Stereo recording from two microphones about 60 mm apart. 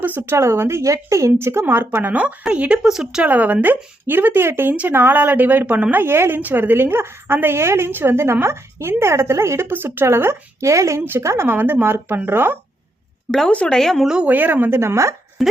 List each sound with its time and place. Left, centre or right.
0.0 s a woman's voice: right
0.3 s a woman's voice: right
2.1 s speech: centre
2.8 s speech: centre
3.2 s a woman's voice: right
6.0 s a woman's voice: right
10.7 s speech: right
11.4 s a woman's voice: right
13.5 s speech: left
13.7 s speech: centre
14.3 s a woman's voice: right
14.8 s a woman's voice: right
15.4 s speech: centre